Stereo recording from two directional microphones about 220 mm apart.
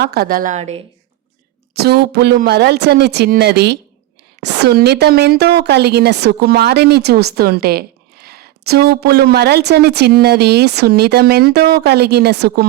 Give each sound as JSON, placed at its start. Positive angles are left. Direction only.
{"t": 0.0, "sound": "a woman's voice", "side_deg": -45}
{"t": 1.7, "sound": "a woman's voice", "side_deg": -45}